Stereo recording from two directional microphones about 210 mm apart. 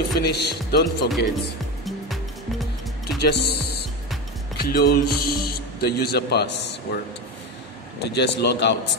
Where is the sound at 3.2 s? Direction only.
50° left (ahead or behind).